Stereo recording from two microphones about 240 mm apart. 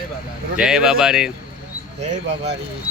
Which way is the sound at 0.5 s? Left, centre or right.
Centre.